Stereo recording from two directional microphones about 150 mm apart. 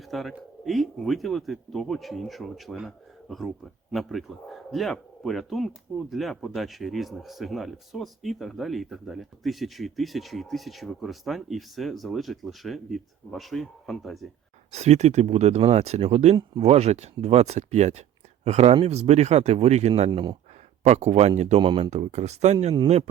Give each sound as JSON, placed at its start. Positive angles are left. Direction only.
{"t": 0.1, "sound": "speech", "side_deg": 0}
{"t": 14.7, "sound": "speech", "side_deg": -45}
{"t": 20.1, "sound": "speech", "side_deg": -30}
{"t": 20.8, "sound": "speech", "side_deg": -50}
{"t": 21.6, "sound": "speech", "side_deg": -35}
{"t": 21.8, "sound": "speech", "side_deg": -45}